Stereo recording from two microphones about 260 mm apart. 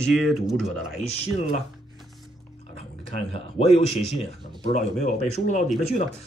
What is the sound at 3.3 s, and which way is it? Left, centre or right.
Speech, left.